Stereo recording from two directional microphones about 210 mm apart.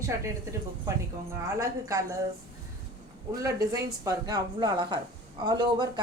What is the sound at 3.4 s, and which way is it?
Speech, 15° right (ahead or behind).